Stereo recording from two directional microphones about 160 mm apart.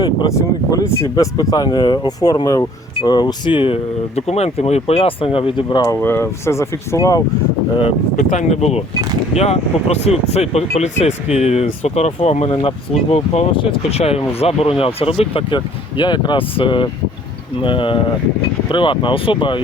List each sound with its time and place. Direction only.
0.0 s speech: 25° left (ahead or behind)
6.0 s speech: 15° left (ahead or behind)
8.1 s speech: 55° left (ahead or behind); by 19.6 s 30° left (ahead or behind)